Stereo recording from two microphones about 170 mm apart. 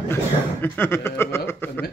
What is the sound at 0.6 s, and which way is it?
Speech, 10° left (ahead or behind).